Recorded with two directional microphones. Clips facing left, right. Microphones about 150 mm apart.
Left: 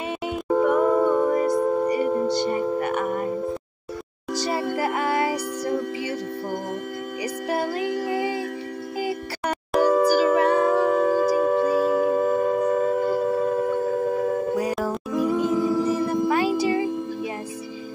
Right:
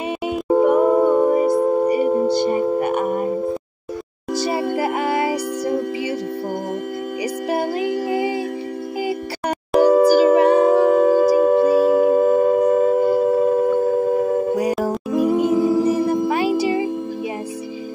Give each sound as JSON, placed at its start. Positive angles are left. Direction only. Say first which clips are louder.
{"t": 0.5, "sound": "a sound", "louder": "right 5 dB", "side_deg": -20}
{"t": 1.5, "sound": "music", "louder": "right 4 dB", "side_deg": -25}
{"t": 4.3, "sound": "music", "louder": "right 4 dB", "side_deg": -15}
{"t": 7.4, "sound": "music", "louder": "right 3 dB", "side_deg": -20}
{"t": 10.0, "sound": "singing bowl", "louder": "right 6 dB", "side_deg": -20}
{"t": 15.0, "sound": "music", "louder": "right 5 dB", "side_deg": -15}